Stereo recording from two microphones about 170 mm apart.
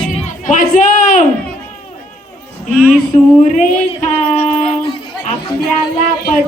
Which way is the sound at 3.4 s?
45° left (ahead or behind).